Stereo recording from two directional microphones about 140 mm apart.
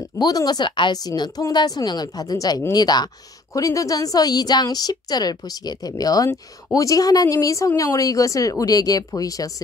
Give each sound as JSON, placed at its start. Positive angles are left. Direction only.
{"t": 0.2, "sound": "a woman's voice", "side_deg": 30}